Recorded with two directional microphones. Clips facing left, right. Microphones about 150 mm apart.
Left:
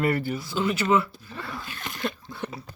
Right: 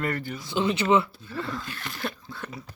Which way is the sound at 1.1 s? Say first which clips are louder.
Right 4 dB; 20° left (ahead or behind).